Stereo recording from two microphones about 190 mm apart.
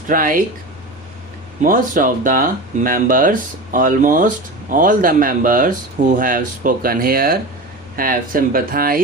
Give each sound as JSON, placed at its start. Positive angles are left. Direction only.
{"t": 0.1, "sound": "speech", "side_deg": -45}
{"t": 1.6, "sound": "speech", "side_deg": -45}